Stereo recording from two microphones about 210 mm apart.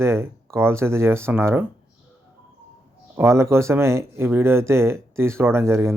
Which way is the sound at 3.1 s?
15° right (ahead or behind).